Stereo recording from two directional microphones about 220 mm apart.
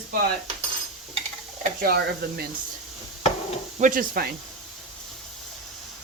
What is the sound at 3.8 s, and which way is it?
Speech, 40° right (ahead or behind).